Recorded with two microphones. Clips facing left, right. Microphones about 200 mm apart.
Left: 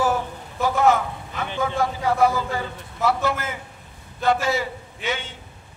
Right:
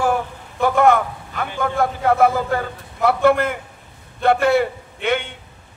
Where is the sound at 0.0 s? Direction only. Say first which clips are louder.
Right 2 dB; 60° right (ahead or behind).